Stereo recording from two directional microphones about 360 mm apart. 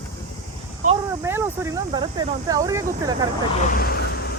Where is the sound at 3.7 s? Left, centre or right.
Left.